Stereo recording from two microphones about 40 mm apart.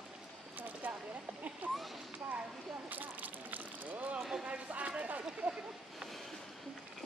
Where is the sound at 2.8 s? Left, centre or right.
Right.